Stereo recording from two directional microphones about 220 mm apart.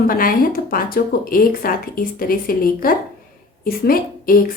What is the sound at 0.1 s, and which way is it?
A woman's voice, 40° left (ahead or behind).